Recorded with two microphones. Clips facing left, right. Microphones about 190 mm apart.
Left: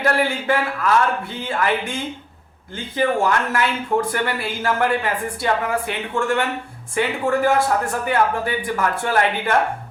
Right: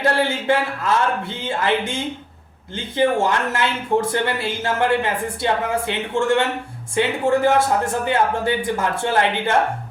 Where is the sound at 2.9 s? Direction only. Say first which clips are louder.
Right 1 dB; 25° right (ahead or behind).